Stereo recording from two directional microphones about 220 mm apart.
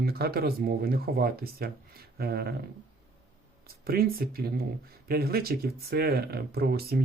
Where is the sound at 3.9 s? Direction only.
45° right (ahead or behind).